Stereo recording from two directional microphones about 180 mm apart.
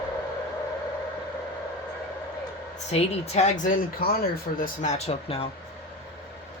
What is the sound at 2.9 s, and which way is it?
Speech, 35° left (ahead or behind).